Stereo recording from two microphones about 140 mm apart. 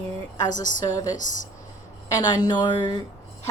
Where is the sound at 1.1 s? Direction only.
65° left (ahead or behind).